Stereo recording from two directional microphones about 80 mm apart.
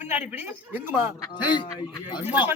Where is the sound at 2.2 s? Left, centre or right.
Right.